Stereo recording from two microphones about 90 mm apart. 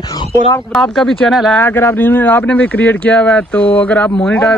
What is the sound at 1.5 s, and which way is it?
Speech, 25° left (ahead or behind).